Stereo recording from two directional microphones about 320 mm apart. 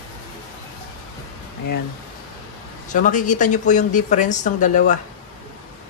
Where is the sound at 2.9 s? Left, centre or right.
Left.